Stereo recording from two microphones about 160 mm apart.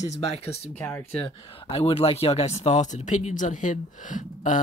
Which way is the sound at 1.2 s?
35° left (ahead or behind).